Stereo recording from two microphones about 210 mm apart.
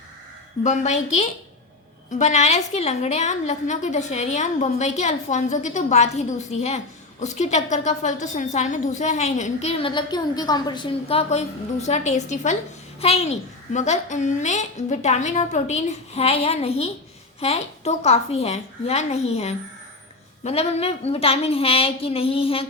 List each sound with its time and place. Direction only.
0.6 s a woman's voice: 35° left (ahead or behind)